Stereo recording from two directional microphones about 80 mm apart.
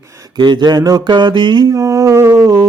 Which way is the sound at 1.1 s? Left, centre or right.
Right.